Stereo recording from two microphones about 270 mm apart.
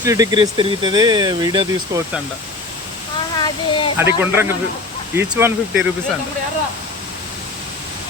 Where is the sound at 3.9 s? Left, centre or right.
Centre.